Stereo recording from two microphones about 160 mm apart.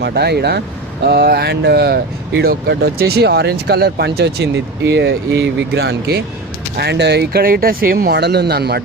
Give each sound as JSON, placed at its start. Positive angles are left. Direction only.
{"t": 0.0, "sound": "speech", "side_deg": -90}
{"t": 1.0, "sound": "speech", "side_deg": -75}